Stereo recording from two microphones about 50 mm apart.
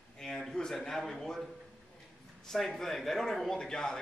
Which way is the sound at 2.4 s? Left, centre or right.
Centre.